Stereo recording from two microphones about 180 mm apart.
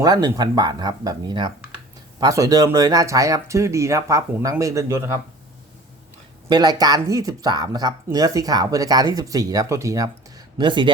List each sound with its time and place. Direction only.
0.0 s speech: 20° right (ahead or behind)
6.5 s speech: 20° right (ahead or behind)